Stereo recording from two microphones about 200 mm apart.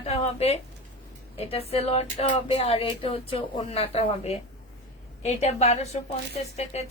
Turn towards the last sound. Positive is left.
turn(degrees=35)  # may be behind; listen again after turning